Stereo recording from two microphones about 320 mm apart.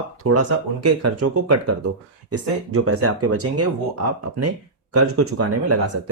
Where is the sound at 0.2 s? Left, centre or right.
Right.